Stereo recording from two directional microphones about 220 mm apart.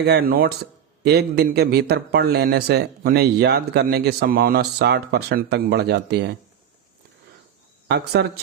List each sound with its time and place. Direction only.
0.0 s speech: 45° right (ahead or behind)
7.9 s speech: 50° right (ahead or behind)